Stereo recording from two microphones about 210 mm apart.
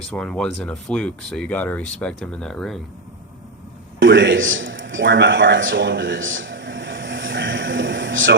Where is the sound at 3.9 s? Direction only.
60° right (ahead or behind).